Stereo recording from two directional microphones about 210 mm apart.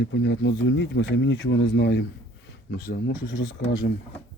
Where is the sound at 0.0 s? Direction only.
60° left (ahead or behind).